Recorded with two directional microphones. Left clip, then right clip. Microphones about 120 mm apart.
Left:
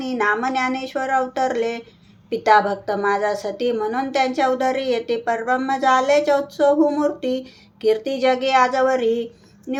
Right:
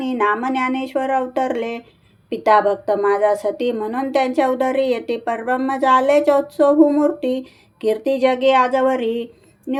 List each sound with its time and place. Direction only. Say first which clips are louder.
0.0 s a woman's voice: right 1 dB; 40° right (ahead or behind)